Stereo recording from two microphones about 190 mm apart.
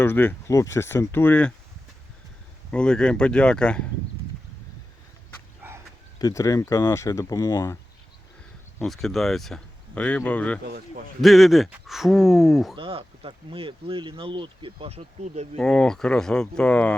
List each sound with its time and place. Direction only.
0.0 s speech: 10° left (ahead or behind)
2.6 s speech: 5° left (ahead or behind)
6.1 s speech: 20° left (ahead or behind)
8.8 s speech: centre (ahead or behind)
12.7 s speech: 30° right (ahead or behind)
15.5 s speech: 5° left (ahead or behind)